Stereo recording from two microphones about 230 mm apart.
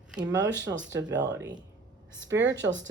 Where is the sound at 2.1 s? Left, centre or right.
Right.